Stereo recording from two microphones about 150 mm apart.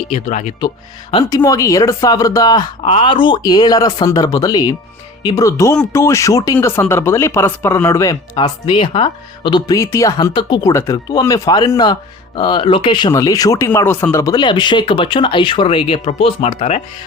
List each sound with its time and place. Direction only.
0.1 s speech: 50° left (ahead or behind)
1.3 s speech: 20° left (ahead or behind)
8.4 s speech: 30° left (ahead or behind)